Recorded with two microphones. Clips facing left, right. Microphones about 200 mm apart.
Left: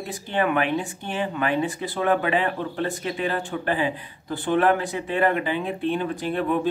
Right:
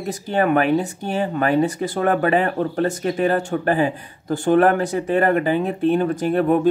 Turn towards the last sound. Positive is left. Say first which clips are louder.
# right 7 dB
turn(degrees=-45)  # may be behind; listen again after turning